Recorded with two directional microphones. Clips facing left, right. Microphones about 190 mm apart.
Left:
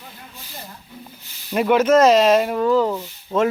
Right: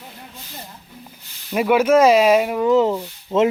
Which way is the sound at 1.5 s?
5° right (ahead or behind).